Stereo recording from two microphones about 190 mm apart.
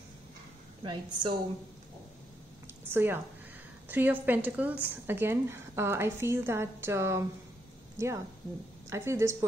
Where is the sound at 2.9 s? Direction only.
10° right (ahead or behind).